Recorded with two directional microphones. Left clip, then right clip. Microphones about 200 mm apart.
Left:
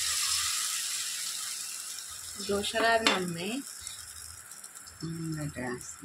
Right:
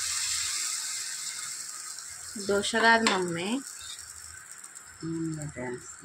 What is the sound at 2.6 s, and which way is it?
Speech, 35° right (ahead or behind).